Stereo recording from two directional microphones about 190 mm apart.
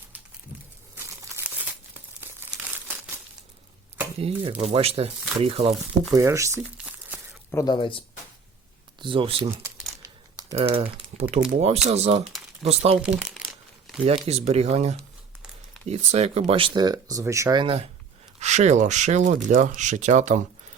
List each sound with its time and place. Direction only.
0.9 s crumpling: 15° right (ahead or behind)
4.2 s speech: 30° right (ahead or behind)
6.1 s speech: 15° right (ahead or behind)
7.5 s speech: 20° left (ahead or behind)
9.0 s speech: 25° right (ahead or behind)
9.5 s crumpling: 15° right (ahead or behind)
10.0 s a sound: 15° right (ahead or behind)
10.8 s speech: 30° right (ahead or behind)
13.0 s crumpling: 5° right (ahead or behind)
14.3 s speech: 35° right (ahead or behind)
18.3 s speech: 35° right (ahead or behind)